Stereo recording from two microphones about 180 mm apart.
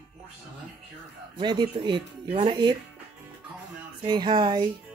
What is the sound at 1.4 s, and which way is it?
Speech, 25° right (ahead or behind).